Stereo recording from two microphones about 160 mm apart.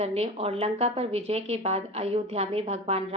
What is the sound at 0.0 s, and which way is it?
A woman's voice, 40° right (ahead or behind).